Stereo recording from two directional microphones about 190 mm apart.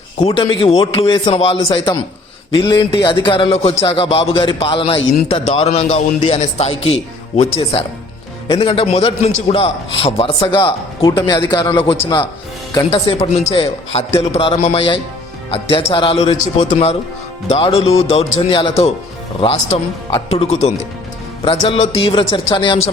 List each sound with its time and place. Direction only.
0.2 s a man's voice: 30° left (ahead or behind)